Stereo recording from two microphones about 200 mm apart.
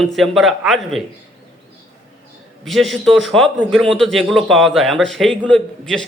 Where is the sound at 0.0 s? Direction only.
Centre (ahead or behind).